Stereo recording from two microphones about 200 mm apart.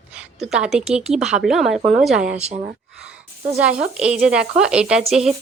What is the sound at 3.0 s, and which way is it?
Speech, 5° right (ahead or behind).